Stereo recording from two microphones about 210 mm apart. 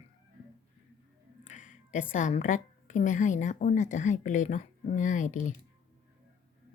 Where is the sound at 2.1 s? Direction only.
35° left (ahead or behind).